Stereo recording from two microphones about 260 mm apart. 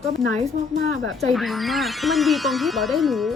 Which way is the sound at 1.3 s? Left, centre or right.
Centre.